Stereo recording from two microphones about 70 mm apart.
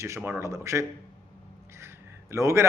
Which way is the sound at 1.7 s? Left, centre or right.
Right.